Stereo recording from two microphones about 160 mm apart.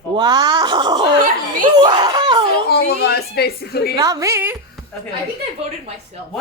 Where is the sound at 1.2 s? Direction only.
55° right (ahead or behind).